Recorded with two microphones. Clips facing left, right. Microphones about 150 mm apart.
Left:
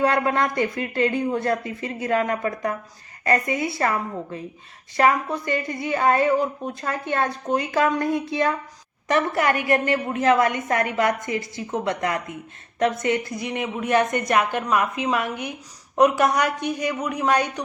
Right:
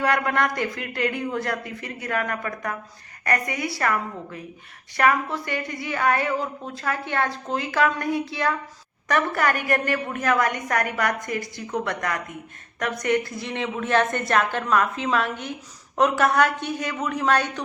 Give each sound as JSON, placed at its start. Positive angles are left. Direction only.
{"t": 0.0, "sound": "a woman's voice", "side_deg": 25}